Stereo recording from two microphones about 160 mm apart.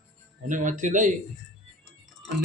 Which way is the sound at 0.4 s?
50° right (ahead or behind).